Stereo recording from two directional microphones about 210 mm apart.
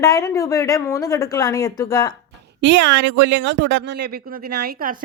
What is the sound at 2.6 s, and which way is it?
Speech, 60° right (ahead or behind).